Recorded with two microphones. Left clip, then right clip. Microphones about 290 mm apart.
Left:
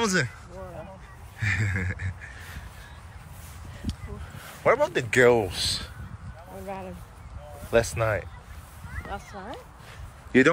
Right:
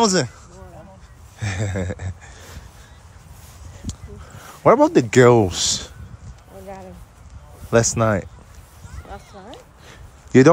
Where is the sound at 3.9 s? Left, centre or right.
Right.